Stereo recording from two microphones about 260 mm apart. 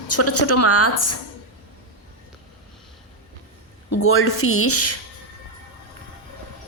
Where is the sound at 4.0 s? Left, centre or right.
Left.